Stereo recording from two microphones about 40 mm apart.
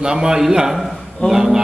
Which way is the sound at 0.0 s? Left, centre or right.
Centre.